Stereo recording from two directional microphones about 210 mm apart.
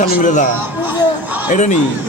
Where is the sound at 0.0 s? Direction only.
35° left (ahead or behind).